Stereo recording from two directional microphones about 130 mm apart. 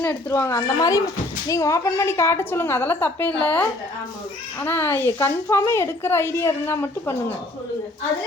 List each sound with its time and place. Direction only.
0.0 s a woman's voice: 20° left (ahead or behind)